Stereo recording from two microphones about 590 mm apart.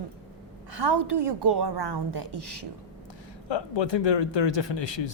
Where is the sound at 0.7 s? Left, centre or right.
Right.